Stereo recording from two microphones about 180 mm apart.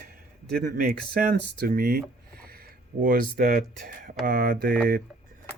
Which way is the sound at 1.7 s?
60° right (ahead or behind).